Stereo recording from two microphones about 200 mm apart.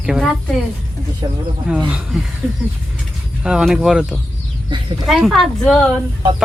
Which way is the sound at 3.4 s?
5° right (ahead or behind).